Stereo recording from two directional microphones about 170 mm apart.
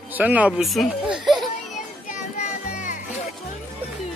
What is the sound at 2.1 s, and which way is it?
Music, 45° left (ahead or behind).